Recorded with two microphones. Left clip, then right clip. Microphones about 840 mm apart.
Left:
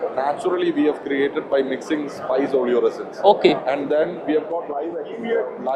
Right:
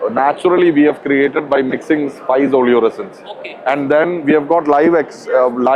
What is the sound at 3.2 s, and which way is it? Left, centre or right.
Speech, left.